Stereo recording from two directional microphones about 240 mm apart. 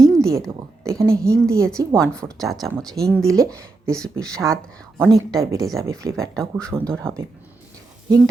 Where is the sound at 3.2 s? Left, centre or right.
Centre.